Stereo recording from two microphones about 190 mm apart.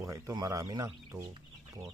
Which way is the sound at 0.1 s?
15° right (ahead or behind).